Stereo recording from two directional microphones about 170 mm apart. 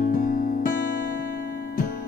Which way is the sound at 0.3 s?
55° left (ahead or behind).